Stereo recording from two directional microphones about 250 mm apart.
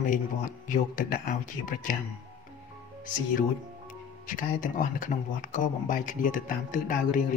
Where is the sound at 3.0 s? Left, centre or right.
Left.